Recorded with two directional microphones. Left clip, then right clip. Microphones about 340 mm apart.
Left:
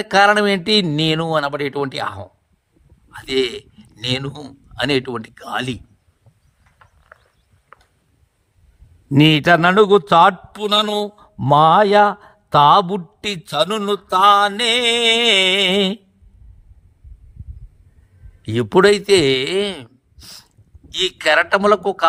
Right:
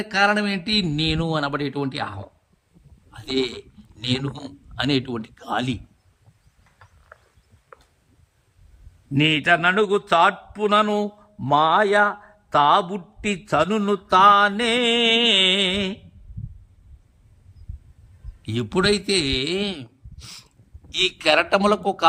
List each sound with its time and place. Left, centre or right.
0.0 s speech: centre
7.7 s a sound: left
9.1 s a man's voice: centre
18.4 s speech: centre